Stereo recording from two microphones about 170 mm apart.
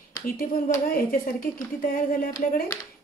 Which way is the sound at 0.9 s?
60° left (ahead or behind).